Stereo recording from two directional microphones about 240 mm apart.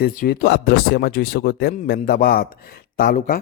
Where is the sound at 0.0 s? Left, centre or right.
Left.